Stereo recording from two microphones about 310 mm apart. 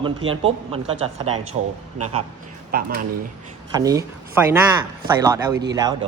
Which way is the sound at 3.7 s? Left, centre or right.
Centre.